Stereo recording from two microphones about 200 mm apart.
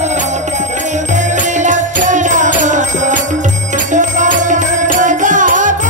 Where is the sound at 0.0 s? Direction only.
35° right (ahead or behind).